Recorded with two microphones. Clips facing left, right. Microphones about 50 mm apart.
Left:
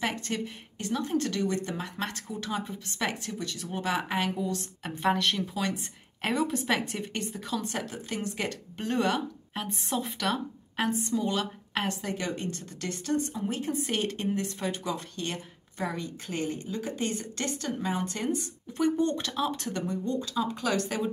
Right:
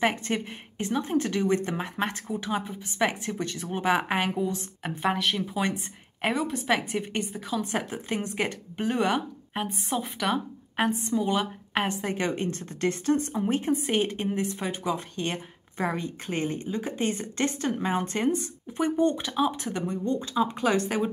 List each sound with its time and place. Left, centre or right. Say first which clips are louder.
0.0 s speech: right 5 dB; right
2.6 s a woman's voice: right 1 dB; centre
3.0 s a woman's voice: right 5 dB; right
6.3 s a woman's voice: even; centre
7.7 s speech: right 4 dB; right
9.8 s a woman's voice: right 2 dB; centre
12.0 s a woman's voice: right 4 dB; right
13.8 s speech: right 3 dB; centre
18.7 s speech: right 2 dB; centre